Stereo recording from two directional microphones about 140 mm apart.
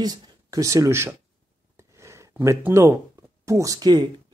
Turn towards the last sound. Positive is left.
turn(degrees=-30)  # may be behind; listen again after turning